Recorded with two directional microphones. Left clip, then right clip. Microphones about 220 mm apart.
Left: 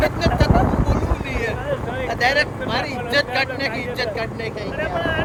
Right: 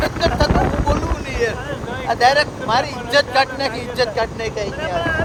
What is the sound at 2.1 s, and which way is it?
Speech, 15° right (ahead or behind).